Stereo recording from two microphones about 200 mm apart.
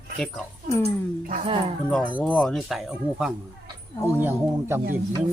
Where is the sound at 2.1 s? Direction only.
5° left (ahead or behind); by 4.4 s 10° right (ahead or behind).